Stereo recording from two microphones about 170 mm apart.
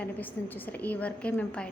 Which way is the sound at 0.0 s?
10° left (ahead or behind).